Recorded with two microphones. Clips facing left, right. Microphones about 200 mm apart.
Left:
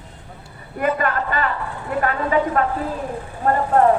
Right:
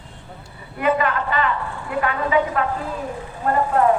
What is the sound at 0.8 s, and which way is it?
A woman's voice, 45° left (ahead or behind).